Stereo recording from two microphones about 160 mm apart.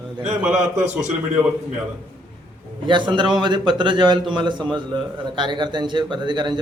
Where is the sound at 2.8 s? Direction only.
30° right (ahead or behind).